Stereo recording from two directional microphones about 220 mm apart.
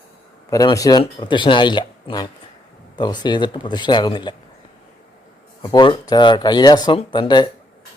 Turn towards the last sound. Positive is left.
turn(degrees=20)  # may be behind; listen again after turning